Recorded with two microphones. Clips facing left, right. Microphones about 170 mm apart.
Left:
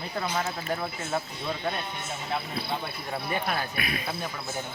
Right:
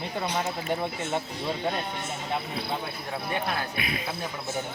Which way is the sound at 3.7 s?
20° right (ahead or behind).